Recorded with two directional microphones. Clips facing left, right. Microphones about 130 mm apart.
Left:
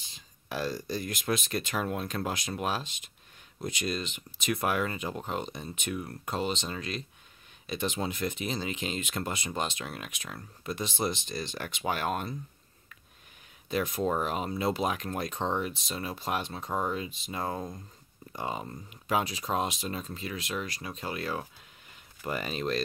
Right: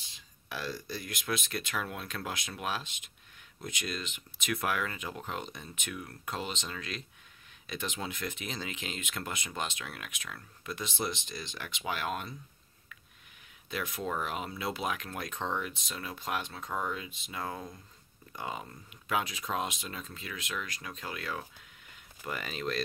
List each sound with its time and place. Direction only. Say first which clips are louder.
0.1 s speech: left 5 dB; 40° left (ahead or behind)
13.7 s speech: left 7 dB; 35° left (ahead or behind)